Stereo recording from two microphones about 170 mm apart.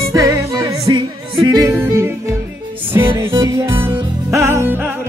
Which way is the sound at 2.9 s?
15° right (ahead or behind).